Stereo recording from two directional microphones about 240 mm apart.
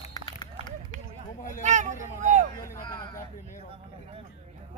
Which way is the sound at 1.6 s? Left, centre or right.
Right.